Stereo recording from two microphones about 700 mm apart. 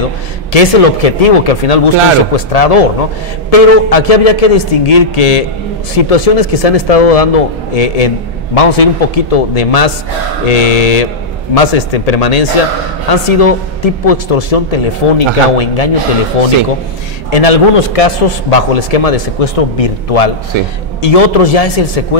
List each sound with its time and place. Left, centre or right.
0.5 s a man's voice: left
17.3 s a man's voice: left
20.5 s a man's voice: right
21.0 s a man's voice: left